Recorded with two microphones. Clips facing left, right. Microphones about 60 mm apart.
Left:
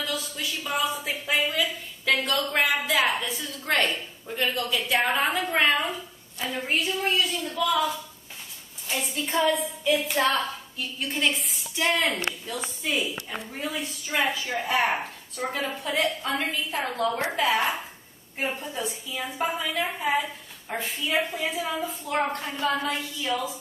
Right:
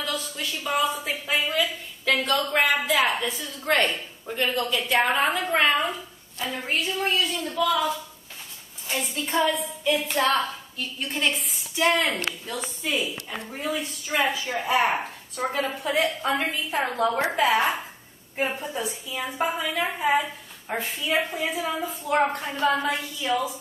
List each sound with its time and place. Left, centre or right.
0.0 s a sound: centre
3.2 s a woman's voice: centre
16.0 s a woman's voice: right
16.3 s a woman's voice: centre